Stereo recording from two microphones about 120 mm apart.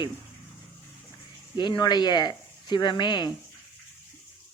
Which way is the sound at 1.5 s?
40° left (ahead or behind).